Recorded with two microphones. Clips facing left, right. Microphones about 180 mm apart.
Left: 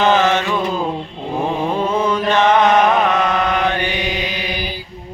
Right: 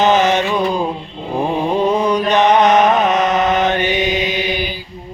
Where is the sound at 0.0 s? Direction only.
20° right (ahead or behind).